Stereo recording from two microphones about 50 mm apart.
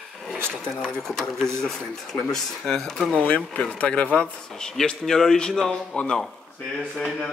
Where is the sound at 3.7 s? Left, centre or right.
Left.